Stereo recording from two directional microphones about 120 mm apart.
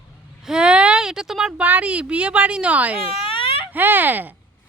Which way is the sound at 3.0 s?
50° left (ahead or behind).